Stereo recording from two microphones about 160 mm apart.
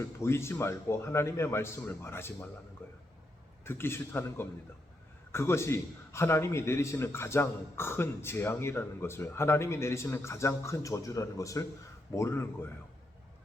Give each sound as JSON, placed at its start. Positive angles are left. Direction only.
{"t": 0.0, "sound": "a man's voice", "side_deg": 15}
{"t": 3.6, "sound": "a man's voice", "side_deg": 15}